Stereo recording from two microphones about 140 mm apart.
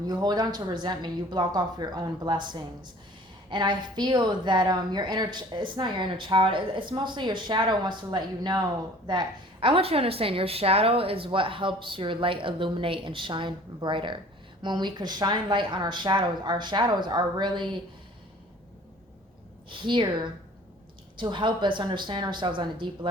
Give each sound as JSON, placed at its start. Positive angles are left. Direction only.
{"t": 0.1, "sound": "a woman's voice", "side_deg": -30}
{"t": 19.7, "sound": "a woman's voice", "side_deg": -35}